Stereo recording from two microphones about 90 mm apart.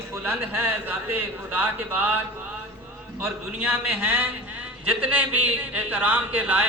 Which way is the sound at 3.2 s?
20° right (ahead or behind).